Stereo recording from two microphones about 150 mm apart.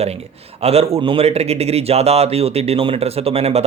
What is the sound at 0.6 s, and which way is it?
A man's voice, 40° right (ahead or behind).